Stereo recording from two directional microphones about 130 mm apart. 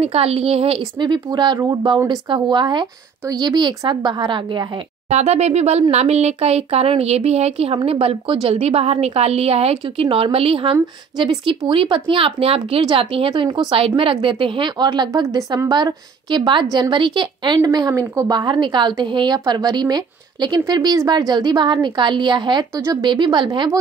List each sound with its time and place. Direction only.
0.0 s a woman's voice: 50° right (ahead or behind)
5.1 s speech: 55° right (ahead or behind)
13.3 s a woman's voice: 35° right (ahead or behind)
18.3 s a woman's voice: 35° right (ahead or behind)